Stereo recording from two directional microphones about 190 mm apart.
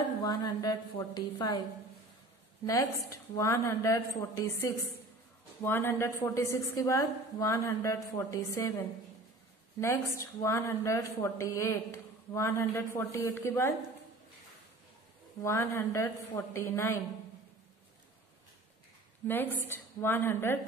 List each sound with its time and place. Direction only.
0.2 s a woman's voice: 20° left (ahead or behind)
2.6 s a woman's voice: 15° left (ahead or behind)
15.4 s a woman's voice: 15° left (ahead or behind)
19.2 s a woman's voice: 10° left (ahead or behind)